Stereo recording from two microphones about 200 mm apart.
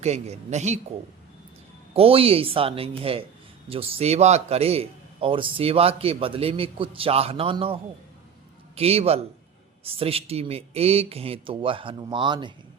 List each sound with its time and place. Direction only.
0.0 s a man's voice: 35° right (ahead or behind)
1.9 s a man's voice: 30° right (ahead or behind)